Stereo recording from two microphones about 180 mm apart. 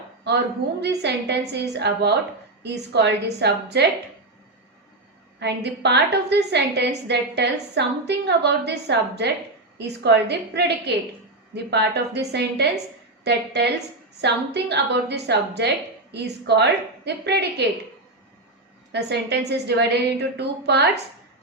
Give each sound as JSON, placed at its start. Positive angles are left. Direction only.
{"t": 0.8, "sound": "a woman's voice", "side_deg": -70}
{"t": 5.4, "sound": "a woman's voice", "side_deg": -70}
{"t": 18.9, "sound": "a woman's voice", "side_deg": -70}